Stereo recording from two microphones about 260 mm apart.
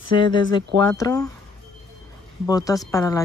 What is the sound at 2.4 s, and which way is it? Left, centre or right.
Speech, centre.